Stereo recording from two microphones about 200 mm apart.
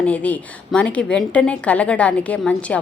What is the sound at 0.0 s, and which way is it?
A woman's voice, 5° left (ahead or behind).